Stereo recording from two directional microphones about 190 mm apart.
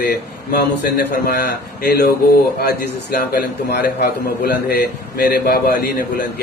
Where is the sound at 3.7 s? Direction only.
60° left (ahead or behind).